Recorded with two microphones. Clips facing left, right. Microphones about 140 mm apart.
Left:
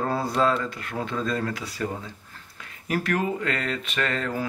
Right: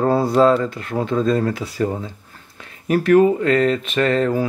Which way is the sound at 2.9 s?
30° right (ahead or behind).